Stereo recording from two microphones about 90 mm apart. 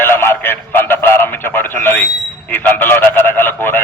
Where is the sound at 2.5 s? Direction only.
20° left (ahead or behind).